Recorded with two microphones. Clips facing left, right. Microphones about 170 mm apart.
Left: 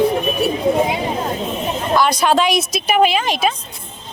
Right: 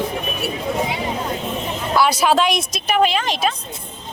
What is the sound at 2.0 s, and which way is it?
A woman's voice, 5° right (ahead or behind).